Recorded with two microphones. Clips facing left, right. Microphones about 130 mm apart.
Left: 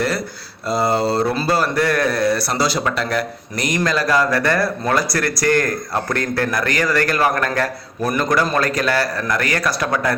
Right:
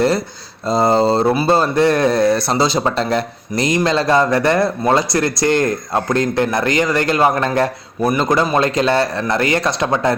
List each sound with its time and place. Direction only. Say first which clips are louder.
0.7 s speech: right 4 dB; 20° right (ahead or behind)